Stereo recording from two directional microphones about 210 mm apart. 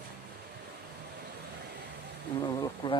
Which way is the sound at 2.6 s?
20° left (ahead or behind).